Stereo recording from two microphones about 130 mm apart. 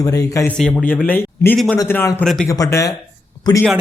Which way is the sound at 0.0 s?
25° left (ahead or behind).